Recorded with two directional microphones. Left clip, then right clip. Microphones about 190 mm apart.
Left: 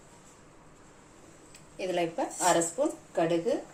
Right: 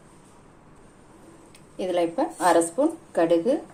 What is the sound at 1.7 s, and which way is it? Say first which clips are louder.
Speech: right 6 dB; 35° right (ahead or behind).